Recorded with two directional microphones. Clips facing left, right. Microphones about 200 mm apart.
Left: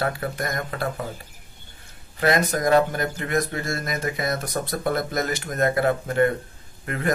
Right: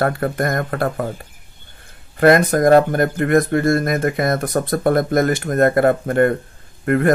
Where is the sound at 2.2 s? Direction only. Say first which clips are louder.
Right 9 dB; 55° right (ahead or behind).